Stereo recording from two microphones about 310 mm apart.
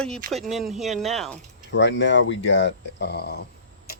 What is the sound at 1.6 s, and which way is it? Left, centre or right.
Speech, left.